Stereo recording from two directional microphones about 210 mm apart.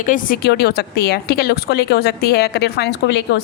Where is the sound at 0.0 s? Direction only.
40° left (ahead or behind).